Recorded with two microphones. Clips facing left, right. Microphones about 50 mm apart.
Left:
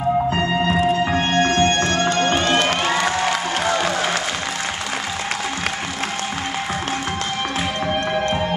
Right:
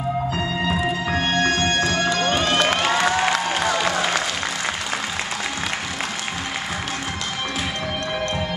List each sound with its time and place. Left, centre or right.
0.3 s music: left
1.0 s music: left
2.3 s music: centre
3.0 s a sound: centre